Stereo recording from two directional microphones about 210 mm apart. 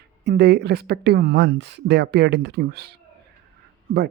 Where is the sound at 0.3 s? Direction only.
55° right (ahead or behind).